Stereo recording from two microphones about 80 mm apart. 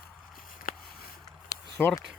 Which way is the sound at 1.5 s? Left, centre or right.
Left.